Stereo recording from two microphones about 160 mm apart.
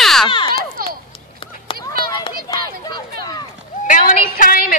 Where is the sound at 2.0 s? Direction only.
25° left (ahead or behind).